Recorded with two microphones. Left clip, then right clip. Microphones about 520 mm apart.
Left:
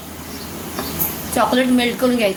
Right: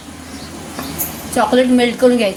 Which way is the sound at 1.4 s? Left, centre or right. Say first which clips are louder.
Right 4 dB; left.